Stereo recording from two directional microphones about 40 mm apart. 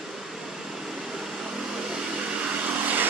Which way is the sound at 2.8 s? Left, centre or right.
Right.